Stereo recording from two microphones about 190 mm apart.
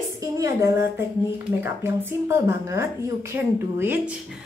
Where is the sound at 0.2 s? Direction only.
15° right (ahead or behind).